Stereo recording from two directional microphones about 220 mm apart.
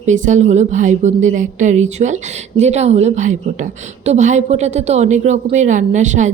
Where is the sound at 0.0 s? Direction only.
35° right (ahead or behind).